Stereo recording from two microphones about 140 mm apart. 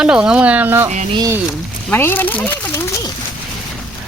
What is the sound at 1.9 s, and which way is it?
Speech, 15° left (ahead or behind).